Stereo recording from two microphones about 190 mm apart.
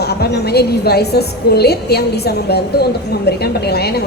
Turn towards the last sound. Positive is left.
turn(degrees=60)  # may be behind; listen again after turning